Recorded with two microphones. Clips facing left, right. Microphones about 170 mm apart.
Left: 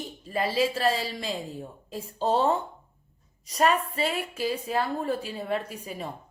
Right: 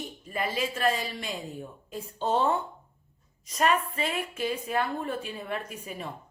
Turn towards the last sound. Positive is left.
turn(degrees=35)  # may be behind; listen again after turning